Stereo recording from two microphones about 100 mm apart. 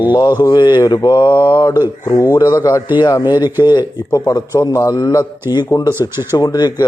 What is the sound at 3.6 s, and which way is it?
Mantra, 50° left (ahead or behind).